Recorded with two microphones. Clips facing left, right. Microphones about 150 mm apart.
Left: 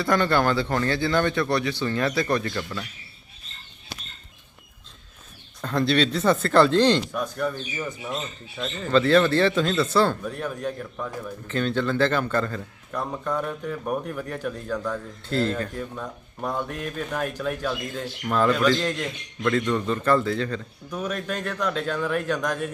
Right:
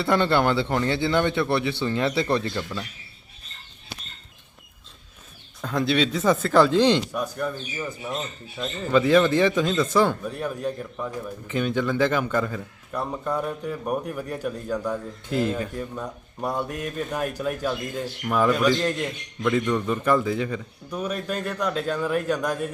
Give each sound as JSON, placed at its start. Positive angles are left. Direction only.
{"t": 0.0, "sound": "a man's voice", "side_deg": -25}
{"t": 2.5, "sound": "a man's voice", "side_deg": -10}
{"t": 5.6, "sound": "a man's voice", "side_deg": -5}